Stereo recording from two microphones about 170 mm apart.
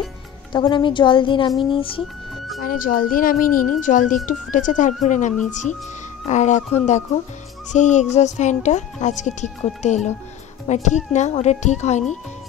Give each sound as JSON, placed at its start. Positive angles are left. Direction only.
{"t": 0.5, "sound": "a woman's voice", "side_deg": 25}
{"t": 2.6, "sound": "speech", "side_deg": 55}